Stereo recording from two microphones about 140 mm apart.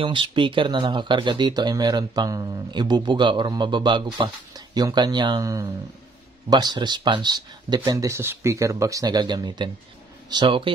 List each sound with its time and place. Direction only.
0.0 s speech: 35° right (ahead or behind)